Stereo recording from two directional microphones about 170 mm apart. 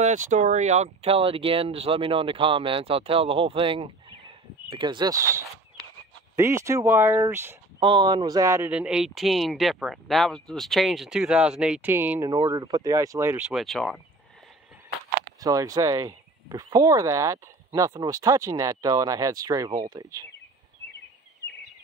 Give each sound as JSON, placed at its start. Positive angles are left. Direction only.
{"t": 0.0, "sound": "speech", "side_deg": -45}
{"t": 6.3, "sound": "speech", "side_deg": -15}
{"t": 7.8, "sound": "speech", "side_deg": -30}
{"t": 12.3, "sound": "speech", "side_deg": -25}
{"t": 13.5, "sound": "speech", "side_deg": 0}
{"t": 15.4, "sound": "speech", "side_deg": -20}